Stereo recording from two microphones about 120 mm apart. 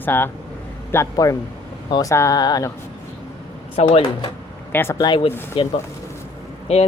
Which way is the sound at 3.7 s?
55° left (ahead or behind).